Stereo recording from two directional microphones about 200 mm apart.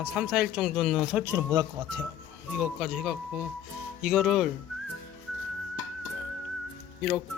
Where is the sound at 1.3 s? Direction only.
20° right (ahead or behind).